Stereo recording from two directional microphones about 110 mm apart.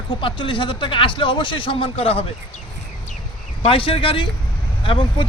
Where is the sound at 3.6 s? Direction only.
55° left (ahead or behind).